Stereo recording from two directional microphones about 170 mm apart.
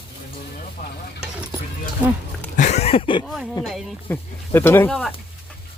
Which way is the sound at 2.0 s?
5° right (ahead or behind).